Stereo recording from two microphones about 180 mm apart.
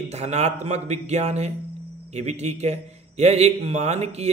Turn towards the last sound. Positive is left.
turn(degrees=-35)  # may be behind; listen again after turning